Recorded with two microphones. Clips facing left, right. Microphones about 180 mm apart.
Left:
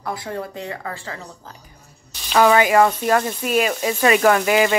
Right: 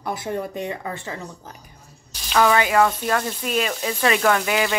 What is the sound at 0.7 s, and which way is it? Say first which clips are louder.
Speech: right 1 dB; 20° right (ahead or behind).